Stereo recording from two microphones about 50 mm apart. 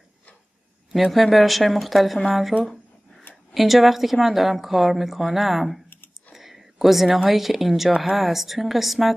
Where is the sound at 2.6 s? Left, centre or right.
Centre.